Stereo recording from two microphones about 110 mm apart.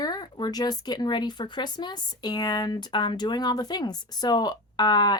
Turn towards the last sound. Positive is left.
turn(degrees=40)  # may be behind; listen again after turning